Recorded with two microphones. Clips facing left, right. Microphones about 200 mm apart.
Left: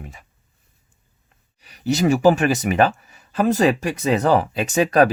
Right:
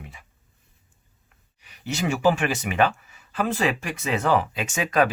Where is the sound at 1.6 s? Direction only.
40° left (ahead or behind).